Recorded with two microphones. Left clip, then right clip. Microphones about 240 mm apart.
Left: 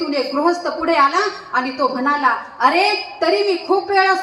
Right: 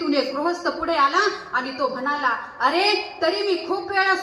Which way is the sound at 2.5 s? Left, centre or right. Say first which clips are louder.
Left 3 dB; left.